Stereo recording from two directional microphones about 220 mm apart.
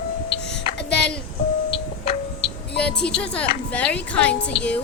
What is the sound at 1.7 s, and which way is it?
Music, 25° left (ahead or behind).